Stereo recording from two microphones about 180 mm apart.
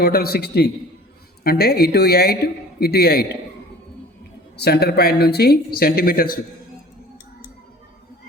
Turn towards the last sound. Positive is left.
turn(degrees=55)  # may be behind; listen again after turning